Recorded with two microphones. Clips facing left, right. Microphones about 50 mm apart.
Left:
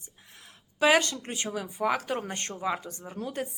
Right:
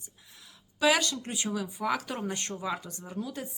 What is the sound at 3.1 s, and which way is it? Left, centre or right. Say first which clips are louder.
Speech: left 3 dB; left.